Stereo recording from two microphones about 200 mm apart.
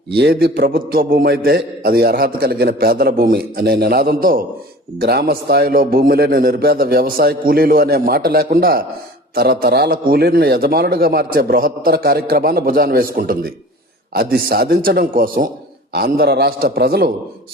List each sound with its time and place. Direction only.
0.1 s a man's voice: 55° right (ahead or behind)